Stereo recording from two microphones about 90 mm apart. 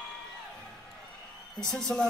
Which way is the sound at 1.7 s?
5° left (ahead or behind).